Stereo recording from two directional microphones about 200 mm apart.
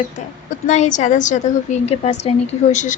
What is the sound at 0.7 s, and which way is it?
A woman's voice, 35° left (ahead or behind).